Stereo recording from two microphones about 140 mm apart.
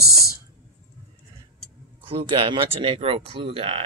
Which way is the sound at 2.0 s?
40° right (ahead or behind).